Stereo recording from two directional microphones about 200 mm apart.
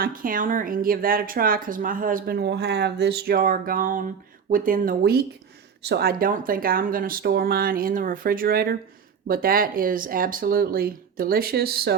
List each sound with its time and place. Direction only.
0.0 s speech: 45° right (ahead or behind)